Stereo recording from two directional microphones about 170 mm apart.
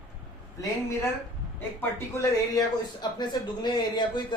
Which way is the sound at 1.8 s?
15° left (ahead or behind).